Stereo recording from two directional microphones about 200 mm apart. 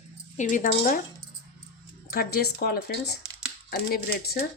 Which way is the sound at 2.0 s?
50° left (ahead or behind).